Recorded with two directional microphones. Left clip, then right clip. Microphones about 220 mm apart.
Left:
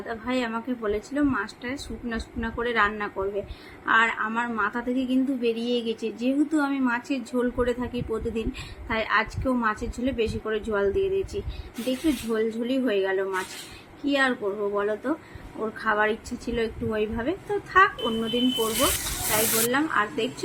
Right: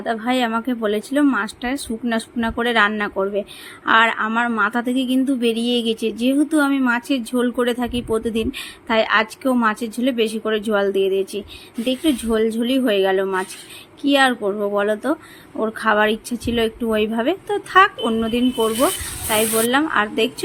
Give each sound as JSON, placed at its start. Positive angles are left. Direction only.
{"t": 0.0, "sound": "a woman's voice", "side_deg": -40}
{"t": 19.6, "sound": "a woman's voice", "side_deg": -45}